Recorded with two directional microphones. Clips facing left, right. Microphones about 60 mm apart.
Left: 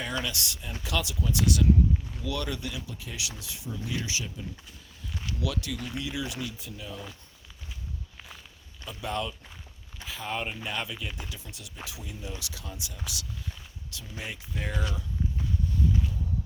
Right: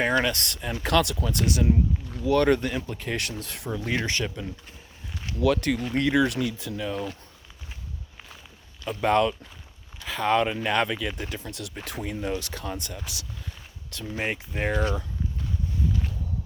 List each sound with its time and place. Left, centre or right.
0.0 s speech: right
1.5 s speech: right
2.3 s speech: right
5.1 s speech: right
6.0 s speech: right
8.8 s speech: right
11.2 s speech: right
11.5 s speech: right
11.9 s speech: right
12.6 s speech: right